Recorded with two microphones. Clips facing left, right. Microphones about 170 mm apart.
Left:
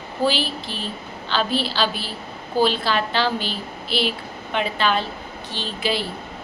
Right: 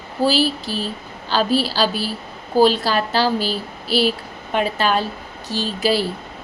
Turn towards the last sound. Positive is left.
turn(degrees=-40)  # may be behind; listen again after turning